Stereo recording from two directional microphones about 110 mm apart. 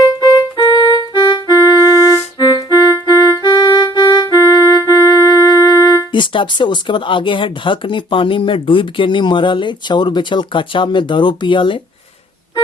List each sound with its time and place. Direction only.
0.5 s music: 45° left (ahead or behind)
1.2 s music: 30° left (ahead or behind)
6.1 s speech: 50° left (ahead or behind)